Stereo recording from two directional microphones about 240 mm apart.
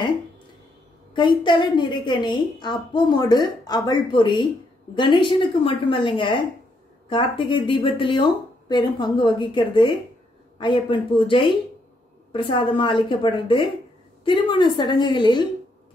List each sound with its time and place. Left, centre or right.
1.1 s a woman's voice: centre